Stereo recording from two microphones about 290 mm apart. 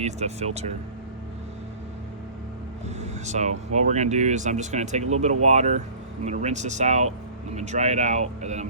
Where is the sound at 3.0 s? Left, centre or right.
Right.